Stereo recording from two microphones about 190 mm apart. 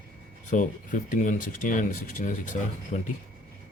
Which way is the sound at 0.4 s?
40° left (ahead or behind).